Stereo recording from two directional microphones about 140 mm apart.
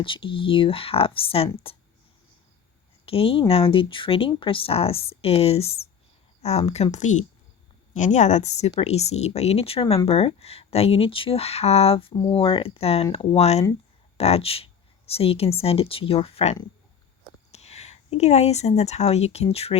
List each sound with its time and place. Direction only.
0.0 s speech: 40° left (ahead or behind)
3.1 s speech: 40° left (ahead or behind)